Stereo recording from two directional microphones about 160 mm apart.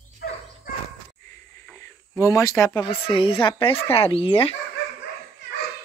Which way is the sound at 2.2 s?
20° left (ahead or behind).